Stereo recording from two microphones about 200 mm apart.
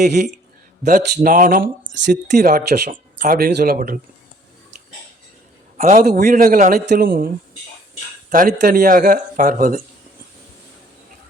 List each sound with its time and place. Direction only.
0.0 s speech: 55° right (ahead or behind)
0.9 s speech: 45° right (ahead or behind)
2.0 s speech: 55° right (ahead or behind)
5.7 s speech: 40° right (ahead or behind)
8.3 s speech: 40° right (ahead or behind)